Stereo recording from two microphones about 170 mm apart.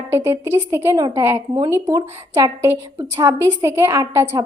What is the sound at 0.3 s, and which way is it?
A woman's voice, 15° right (ahead or behind).